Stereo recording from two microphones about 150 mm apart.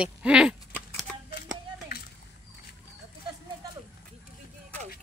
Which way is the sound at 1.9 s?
90° left.